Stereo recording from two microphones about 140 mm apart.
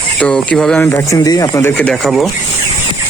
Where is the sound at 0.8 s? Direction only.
15° left (ahead or behind).